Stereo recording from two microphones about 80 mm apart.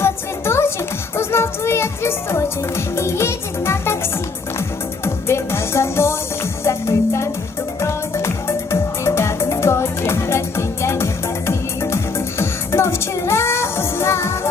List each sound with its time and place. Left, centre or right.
0.0 s music: left
1.1 s speech: left
5.0 s music: left